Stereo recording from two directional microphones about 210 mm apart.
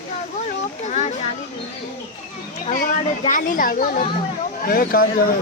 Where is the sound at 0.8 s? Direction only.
35° left (ahead or behind).